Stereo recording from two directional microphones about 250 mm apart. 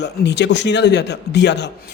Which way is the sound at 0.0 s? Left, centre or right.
Left.